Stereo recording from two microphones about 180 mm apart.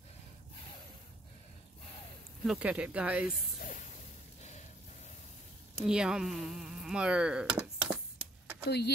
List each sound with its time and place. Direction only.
2.4 s speech: 5° right (ahead or behind)
3.5 s a sound: 45° left (ahead or behind)
5.9 s speech: 5° right (ahead or behind)
8.6 s speech: 65° left (ahead or behind)